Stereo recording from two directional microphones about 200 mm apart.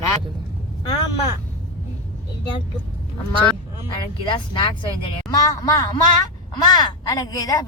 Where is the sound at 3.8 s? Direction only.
25° left (ahead or behind).